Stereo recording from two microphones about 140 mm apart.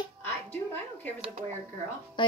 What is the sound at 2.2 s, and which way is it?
Speech, 35° left (ahead or behind).